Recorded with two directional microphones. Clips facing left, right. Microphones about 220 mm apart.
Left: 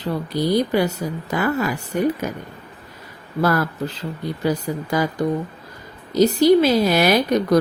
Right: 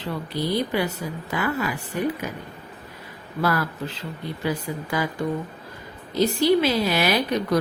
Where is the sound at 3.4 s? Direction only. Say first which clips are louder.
Left 4 dB; 40° left (ahead or behind).